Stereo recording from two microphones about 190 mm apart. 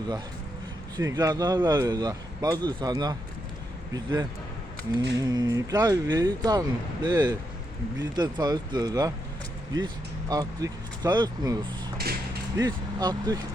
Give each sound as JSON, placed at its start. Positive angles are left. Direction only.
{"t": 0.9, "sound": "speech", "side_deg": -20}
{"t": 11.9, "sound": "a sound", "side_deg": -55}
{"t": 12.5, "sound": "speech", "side_deg": -20}